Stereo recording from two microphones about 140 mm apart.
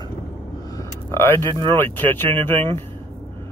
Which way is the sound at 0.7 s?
20° left (ahead or behind).